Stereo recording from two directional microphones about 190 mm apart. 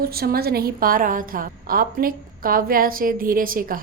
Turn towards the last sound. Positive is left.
turn(degrees=-50)  # may be behind; listen again after turning